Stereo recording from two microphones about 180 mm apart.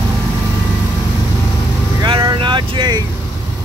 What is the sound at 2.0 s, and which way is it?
Vehicle, 25° right (ahead or behind).